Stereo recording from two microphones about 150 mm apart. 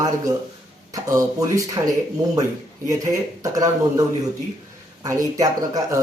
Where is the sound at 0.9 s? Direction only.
20° right (ahead or behind).